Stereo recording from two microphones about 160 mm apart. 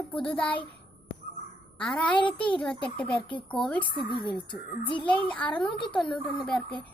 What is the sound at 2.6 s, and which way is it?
Child singing, 5° left (ahead or behind).